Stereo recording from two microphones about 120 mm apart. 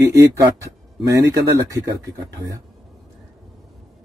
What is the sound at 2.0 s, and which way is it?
Speech, 25° right (ahead or behind).